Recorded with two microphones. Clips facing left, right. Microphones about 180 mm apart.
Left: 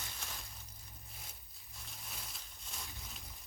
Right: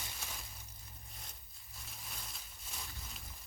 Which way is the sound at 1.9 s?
Centre (ahead or behind).